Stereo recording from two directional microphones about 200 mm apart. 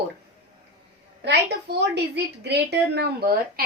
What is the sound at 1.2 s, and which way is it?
A woman's voice, 60° right (ahead or behind).